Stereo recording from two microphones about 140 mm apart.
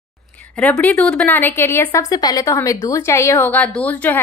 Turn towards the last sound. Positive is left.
turn(degrees=10)  # may be behind; listen again after turning